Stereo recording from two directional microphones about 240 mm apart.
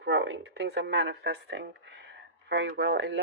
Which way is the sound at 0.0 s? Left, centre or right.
Right.